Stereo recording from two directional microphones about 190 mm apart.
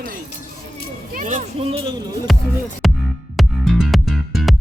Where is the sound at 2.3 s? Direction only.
Centre (ahead or behind).